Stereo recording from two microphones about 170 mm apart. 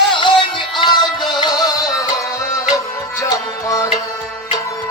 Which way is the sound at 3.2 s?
20° left (ahead or behind).